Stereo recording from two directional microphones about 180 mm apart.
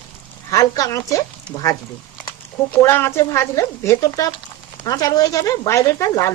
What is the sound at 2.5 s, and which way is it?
Speech, 10° left (ahead or behind).